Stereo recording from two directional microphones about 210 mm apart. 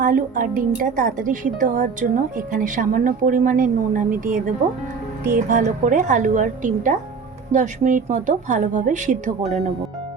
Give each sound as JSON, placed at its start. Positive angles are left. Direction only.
{"t": 0.0, "sound": "a woman's voice", "side_deg": -45}